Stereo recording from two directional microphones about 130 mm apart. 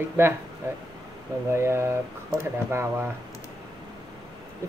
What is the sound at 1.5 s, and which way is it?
Speech, 20° right (ahead or behind).